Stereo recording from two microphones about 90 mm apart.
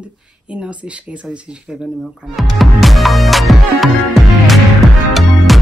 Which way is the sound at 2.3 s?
Centre (ahead or behind).